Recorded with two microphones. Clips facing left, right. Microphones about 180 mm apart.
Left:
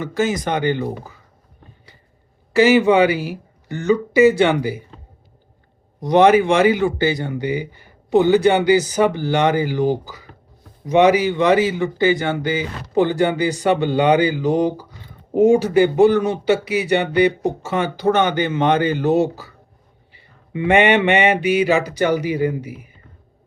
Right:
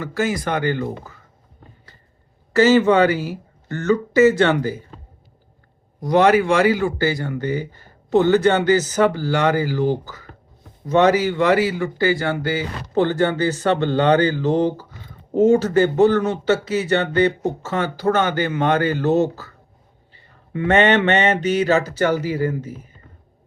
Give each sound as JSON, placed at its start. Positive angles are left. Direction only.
{"t": 0.0, "sound": "speech", "side_deg": 20}
{"t": 2.5, "sound": "speech", "side_deg": 15}
{"t": 6.0, "sound": "speech", "side_deg": 20}